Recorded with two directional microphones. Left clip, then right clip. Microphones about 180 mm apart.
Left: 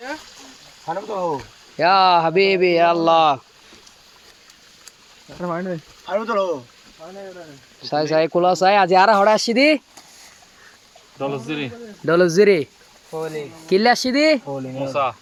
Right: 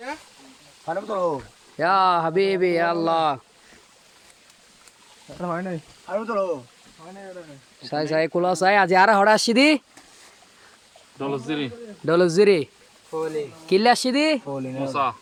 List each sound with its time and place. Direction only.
0.9 s speech: 20° right (ahead or behind)
1.8 s speech: 5° left (ahead or behind)
5.4 s speech: 5° right (ahead or behind)
6.1 s speech: 30° left (ahead or behind)
7.8 s speech: centre (ahead or behind); by 9.8 s 20° right (ahead or behind)
11.2 s speech: 10° right (ahead or behind)
12.0 s speech: centre (ahead or behind)
13.7 s speech: centre (ahead or behind)
14.4 s speech: 25° right (ahead or behind)